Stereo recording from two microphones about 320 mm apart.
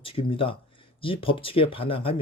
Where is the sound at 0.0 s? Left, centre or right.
Centre.